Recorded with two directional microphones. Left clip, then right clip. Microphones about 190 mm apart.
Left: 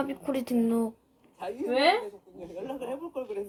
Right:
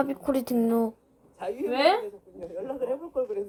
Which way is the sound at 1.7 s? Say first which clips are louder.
Right 1 dB; 35° right (ahead or behind).